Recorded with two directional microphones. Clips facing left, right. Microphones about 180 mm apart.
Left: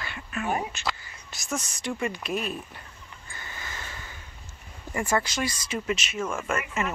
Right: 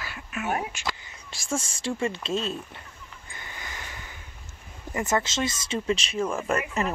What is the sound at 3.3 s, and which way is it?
Sniff, 20° right (ahead or behind).